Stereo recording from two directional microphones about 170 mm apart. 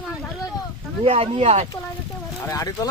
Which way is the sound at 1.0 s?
35° right (ahead or behind).